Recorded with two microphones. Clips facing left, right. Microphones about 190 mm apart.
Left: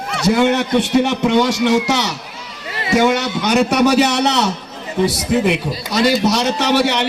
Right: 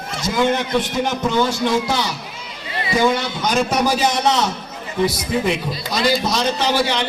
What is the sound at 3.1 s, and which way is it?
A man's voice, 70° left (ahead or behind).